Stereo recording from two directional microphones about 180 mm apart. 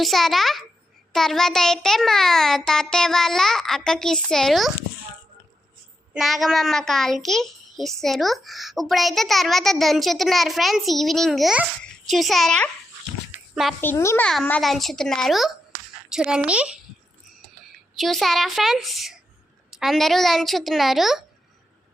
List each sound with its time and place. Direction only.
0.0 s a child's voice: centre (ahead or behind)
6.1 s a child's voice: centre (ahead or behind)
13.3 s a sound: centre (ahead or behind)
13.8 s a child's voice: 15° left (ahead or behind); by 16.7 s 5° right (ahead or behind)
17.9 s a child's voice: centre (ahead or behind)